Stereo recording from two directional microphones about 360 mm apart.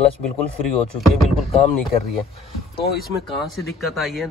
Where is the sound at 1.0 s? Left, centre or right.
Centre.